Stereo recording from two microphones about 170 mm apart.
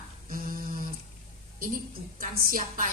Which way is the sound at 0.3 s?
55° right (ahead or behind).